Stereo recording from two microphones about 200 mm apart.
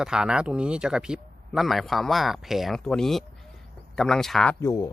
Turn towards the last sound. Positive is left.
turn(degrees=15)  # may be behind; listen again after turning